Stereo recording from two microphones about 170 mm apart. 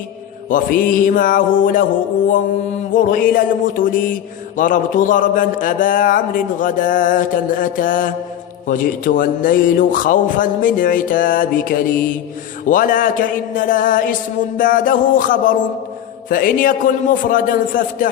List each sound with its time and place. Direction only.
0.5 s speech: 50° left (ahead or behind)